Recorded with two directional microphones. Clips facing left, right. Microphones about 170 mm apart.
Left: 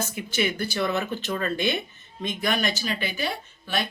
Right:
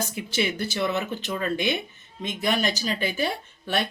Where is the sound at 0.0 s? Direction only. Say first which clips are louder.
Even; 30° right (ahead or behind).